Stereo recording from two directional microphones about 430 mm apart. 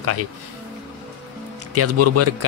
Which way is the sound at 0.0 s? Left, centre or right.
Right.